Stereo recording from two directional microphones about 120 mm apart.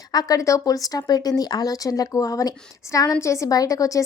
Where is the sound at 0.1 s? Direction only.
30° left (ahead or behind).